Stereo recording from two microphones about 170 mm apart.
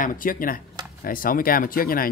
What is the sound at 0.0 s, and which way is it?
Speech, 55° left (ahead or behind).